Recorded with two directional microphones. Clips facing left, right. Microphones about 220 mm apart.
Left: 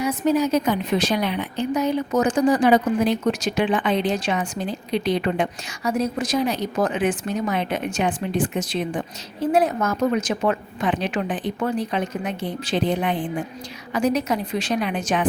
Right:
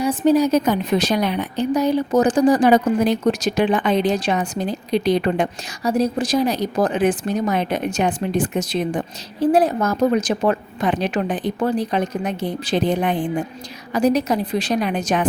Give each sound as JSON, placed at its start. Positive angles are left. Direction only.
{"t": 0.3, "sound": "a woman's voice", "side_deg": -35}
{"t": 13.9, "sound": "a woman's voice", "side_deg": -35}